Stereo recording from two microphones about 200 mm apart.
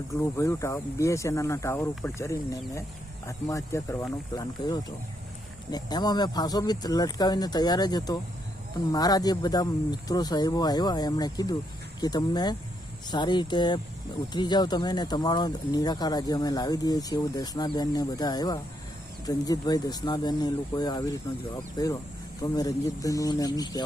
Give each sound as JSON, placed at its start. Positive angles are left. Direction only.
{"t": 0.2, "sound": "speech", "side_deg": 15}